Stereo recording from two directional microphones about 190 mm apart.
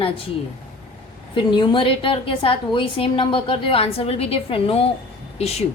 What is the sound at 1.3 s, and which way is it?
A woman's voice, 25° left (ahead or behind).